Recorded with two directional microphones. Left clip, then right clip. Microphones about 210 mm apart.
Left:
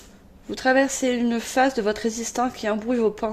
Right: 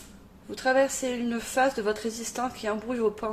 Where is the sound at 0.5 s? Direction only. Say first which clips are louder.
Left 4 dB; 40° left (ahead or behind).